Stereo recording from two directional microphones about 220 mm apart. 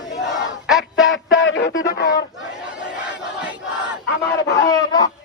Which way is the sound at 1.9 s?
45° left (ahead or behind).